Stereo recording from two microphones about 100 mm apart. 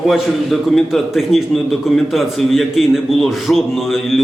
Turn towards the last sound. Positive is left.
turn(degrees=0)  # may be behind; listen again after turning